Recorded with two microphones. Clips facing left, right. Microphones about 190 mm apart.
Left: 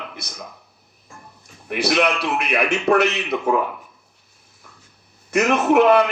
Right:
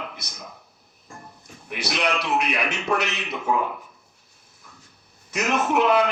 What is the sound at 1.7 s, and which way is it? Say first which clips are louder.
A man's voice: left 6 dB; 60° left (ahead or behind).